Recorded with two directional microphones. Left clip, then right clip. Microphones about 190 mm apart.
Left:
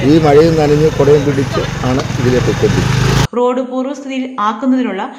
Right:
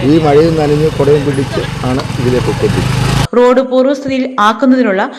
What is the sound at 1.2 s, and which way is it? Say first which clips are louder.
Speech: even; 45° right (ahead or behind).